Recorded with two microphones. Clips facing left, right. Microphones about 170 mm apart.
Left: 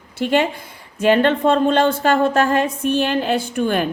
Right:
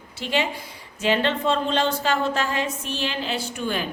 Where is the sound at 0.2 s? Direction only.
50° left (ahead or behind).